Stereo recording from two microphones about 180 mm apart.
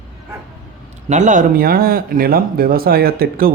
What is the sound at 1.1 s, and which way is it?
Speech, 45° right (ahead or behind).